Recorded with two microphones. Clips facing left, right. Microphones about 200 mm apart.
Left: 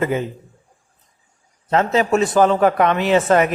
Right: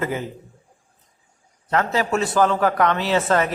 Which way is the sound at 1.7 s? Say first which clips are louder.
Left 4 dB; 20° left (ahead or behind).